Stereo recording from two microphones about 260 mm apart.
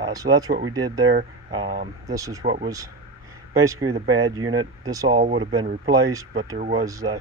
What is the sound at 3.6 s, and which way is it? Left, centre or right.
Speech, centre.